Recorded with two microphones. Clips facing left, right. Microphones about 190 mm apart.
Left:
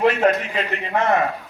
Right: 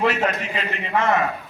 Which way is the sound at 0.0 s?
50° left (ahead or behind).